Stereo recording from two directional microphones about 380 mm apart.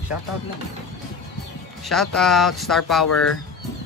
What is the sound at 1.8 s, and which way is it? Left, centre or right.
Speech, centre.